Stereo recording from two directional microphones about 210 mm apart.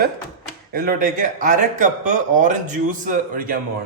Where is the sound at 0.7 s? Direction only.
45° right (ahead or behind).